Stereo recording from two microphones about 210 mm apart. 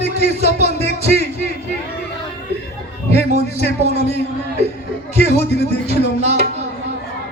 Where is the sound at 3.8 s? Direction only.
30° right (ahead or behind).